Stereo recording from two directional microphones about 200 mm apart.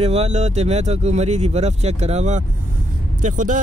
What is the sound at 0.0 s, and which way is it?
Speech, 30° right (ahead or behind).